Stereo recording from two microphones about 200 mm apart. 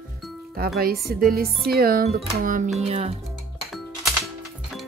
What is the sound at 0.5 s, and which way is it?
Speech, 50° right (ahead or behind).